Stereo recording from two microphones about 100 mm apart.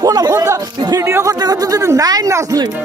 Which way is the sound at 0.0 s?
35° right (ahead or behind).